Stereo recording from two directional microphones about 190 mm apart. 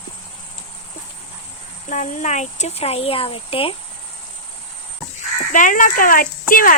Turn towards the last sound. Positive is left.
turn(degrees=45)  # may be behind; listen again after turning